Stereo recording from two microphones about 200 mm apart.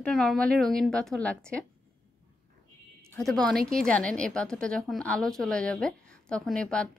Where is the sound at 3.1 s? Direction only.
5° left (ahead or behind).